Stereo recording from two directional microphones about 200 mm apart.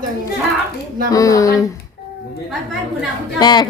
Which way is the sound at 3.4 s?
20° left (ahead or behind).